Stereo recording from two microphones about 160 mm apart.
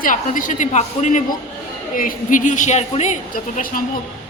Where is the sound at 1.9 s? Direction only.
60° left (ahead or behind).